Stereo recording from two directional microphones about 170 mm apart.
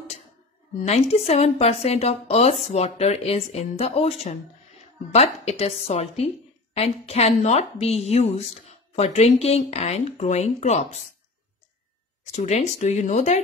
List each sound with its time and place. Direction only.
0.8 s speech: 40° left (ahead or behind)
12.3 s speech: 40° left (ahead or behind)